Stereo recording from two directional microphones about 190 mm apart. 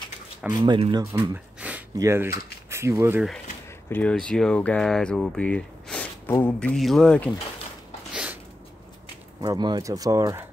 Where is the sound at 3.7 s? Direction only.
10° left (ahead or behind).